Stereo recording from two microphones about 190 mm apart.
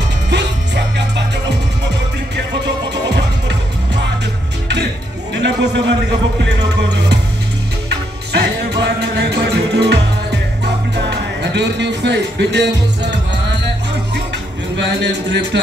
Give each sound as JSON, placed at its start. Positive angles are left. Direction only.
{"t": 0.3, "sound": "music", "side_deg": -65}
{"t": 2.6, "sound": "music", "side_deg": -65}
{"t": 5.3, "sound": "a sound", "side_deg": -65}
{"t": 6.4, "sound": "music", "side_deg": -65}
{"t": 14.8, "sound": "speech", "side_deg": -65}